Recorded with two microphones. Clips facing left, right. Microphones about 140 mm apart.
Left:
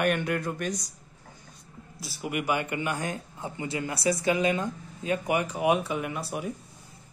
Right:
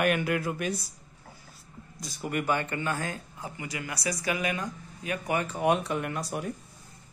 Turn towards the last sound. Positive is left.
turn(degrees=0)  # may be behind; listen again after turning